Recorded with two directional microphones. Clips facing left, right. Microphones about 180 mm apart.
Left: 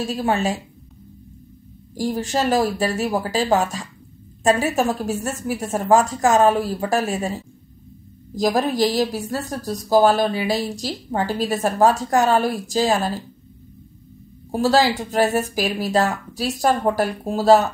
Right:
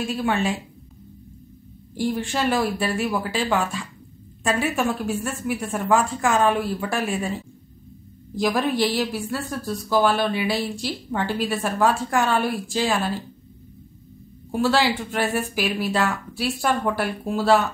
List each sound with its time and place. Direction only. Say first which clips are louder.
0.0 s a woman's voice: left 2 dB; 40° left (ahead or behind)
2.0 s a woman's voice: left 2 dB; 40° left (ahead or behind)
14.5 s a woman's voice: left 3 dB; 40° left (ahead or behind)